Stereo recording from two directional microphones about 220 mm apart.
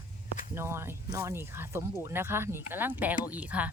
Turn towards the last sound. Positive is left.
turn(degrees=-5)  # may be behind; listen again after turning